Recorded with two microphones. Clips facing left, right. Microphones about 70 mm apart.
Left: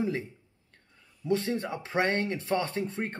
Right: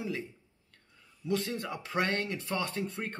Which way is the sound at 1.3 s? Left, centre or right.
Left.